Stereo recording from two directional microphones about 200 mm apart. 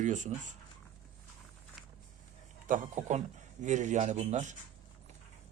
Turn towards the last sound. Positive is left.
turn(degrees=-35)  # may be behind; listen again after turning